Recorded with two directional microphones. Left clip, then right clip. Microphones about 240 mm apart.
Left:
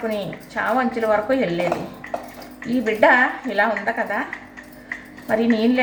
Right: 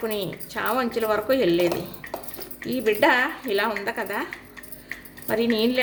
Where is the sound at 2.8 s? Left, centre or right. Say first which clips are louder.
Left 4 dB; right.